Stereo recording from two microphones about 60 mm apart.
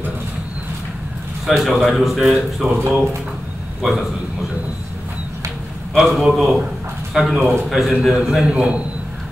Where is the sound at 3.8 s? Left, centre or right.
Centre.